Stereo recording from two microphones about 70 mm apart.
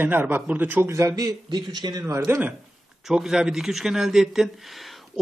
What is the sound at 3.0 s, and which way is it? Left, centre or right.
A man's voice, centre.